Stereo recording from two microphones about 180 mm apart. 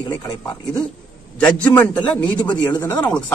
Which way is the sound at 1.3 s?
10° left (ahead or behind).